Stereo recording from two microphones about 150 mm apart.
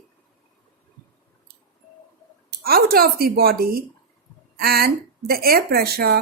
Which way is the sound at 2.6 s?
90° right.